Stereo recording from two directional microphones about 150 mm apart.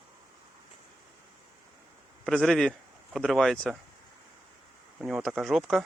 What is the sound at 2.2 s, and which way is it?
Speech, 5° left (ahead or behind).